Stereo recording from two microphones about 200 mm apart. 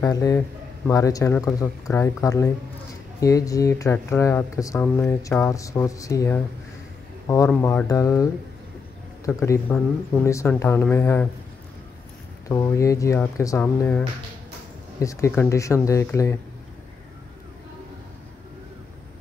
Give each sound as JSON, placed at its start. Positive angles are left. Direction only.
{"t": 0.0, "sound": "speech", "side_deg": 15}
{"t": 12.4, "sound": "speech", "side_deg": 15}